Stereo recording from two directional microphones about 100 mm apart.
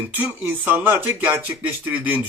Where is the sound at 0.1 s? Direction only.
15° right (ahead or behind).